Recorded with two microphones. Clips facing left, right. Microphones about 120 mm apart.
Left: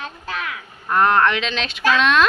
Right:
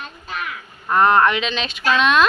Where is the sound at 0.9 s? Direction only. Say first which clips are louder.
Right 1 dB; 5° right (ahead or behind).